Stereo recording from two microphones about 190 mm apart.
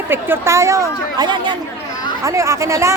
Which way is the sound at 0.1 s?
15° right (ahead or behind).